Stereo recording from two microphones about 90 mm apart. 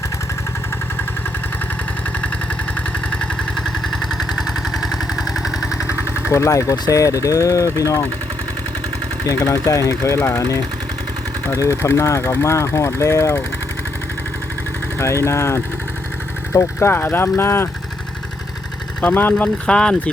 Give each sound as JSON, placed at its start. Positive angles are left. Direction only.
{"t": 4.0, "sound": "vehicle", "side_deg": 5}
{"t": 6.0, "sound": "engine", "side_deg": -20}
{"t": 6.3, "sound": "speech", "side_deg": 35}
{"t": 9.2, "sound": "speech", "side_deg": 30}
{"t": 14.9, "sound": "speech", "side_deg": 30}
{"t": 19.0, "sound": "speech", "side_deg": 20}